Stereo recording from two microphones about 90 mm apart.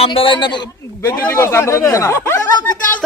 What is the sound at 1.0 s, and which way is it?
Speech, 30° left (ahead or behind).